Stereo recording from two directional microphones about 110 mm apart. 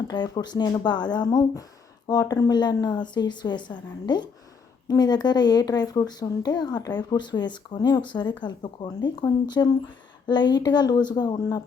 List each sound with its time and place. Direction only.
0.1 s a woman's voice: 40° left (ahead or behind)
9.6 s speech: 30° left (ahead or behind)
10.2 s a woman's voice: 40° left (ahead or behind)